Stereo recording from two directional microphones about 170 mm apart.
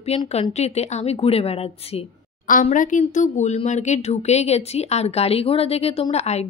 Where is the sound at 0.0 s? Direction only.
35° left (ahead or behind).